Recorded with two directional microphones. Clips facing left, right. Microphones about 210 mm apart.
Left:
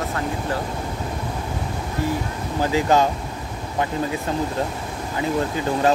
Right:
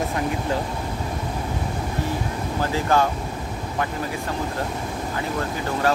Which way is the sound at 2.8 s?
20° left (ahead or behind).